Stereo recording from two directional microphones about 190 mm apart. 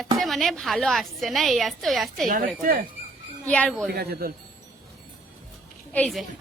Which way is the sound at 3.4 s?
5° left (ahead or behind).